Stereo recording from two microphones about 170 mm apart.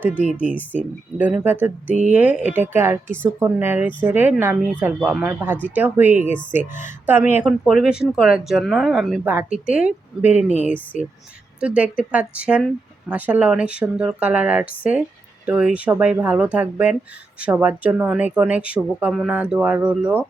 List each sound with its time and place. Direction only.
0.0 s speech: 10° right (ahead or behind)
10.9 s speech: 45° left (ahead or behind)
11.6 s speech: 5° right (ahead or behind)